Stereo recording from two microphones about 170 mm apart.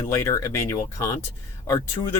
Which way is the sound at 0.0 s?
20° left (ahead or behind).